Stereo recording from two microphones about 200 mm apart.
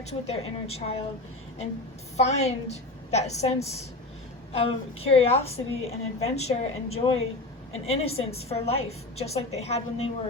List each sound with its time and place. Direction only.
0.0 s a woman's voice: 30° left (ahead or behind)
2.1 s a woman's voice: 35° left (ahead or behind)